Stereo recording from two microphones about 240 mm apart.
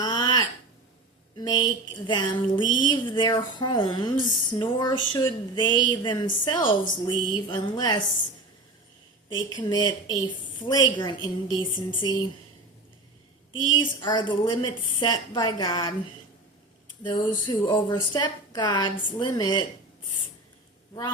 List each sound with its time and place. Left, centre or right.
0.0 s a sound: centre
1.4 s a woman's voice: centre
9.3 s a woman's voice: centre
13.7 s speech: centre
17.0 s speech: centre